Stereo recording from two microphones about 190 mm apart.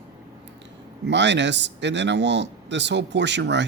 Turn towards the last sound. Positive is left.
turn(degrees=-70)  # may be behind; listen again after turning